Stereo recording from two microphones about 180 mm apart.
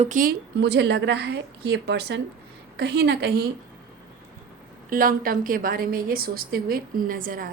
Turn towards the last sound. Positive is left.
turn(degrees=-50)  # may be behind; listen again after turning